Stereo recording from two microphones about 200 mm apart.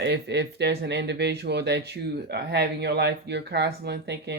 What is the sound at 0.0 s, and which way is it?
Speech, 60° right (ahead or behind).